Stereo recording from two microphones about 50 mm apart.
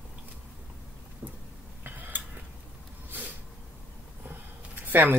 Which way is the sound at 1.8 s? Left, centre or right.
Right.